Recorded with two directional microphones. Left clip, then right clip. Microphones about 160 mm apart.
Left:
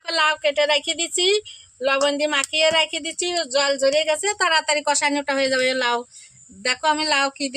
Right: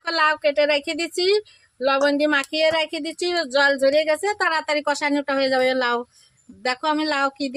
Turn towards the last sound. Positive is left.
turn(degrees=-15)  # may be behind; listen again after turning